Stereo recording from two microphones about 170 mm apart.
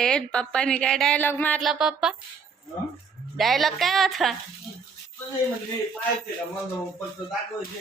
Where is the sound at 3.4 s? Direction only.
Centre (ahead or behind).